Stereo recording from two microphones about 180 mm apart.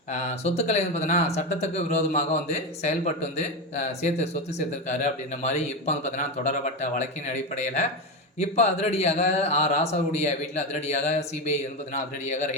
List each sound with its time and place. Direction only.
0.1 s speech: 40° left (ahead or behind)